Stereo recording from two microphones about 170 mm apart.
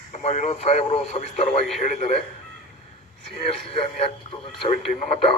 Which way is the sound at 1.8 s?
45° left (ahead or behind).